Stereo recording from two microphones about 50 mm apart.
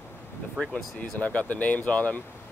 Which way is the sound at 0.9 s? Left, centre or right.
Left.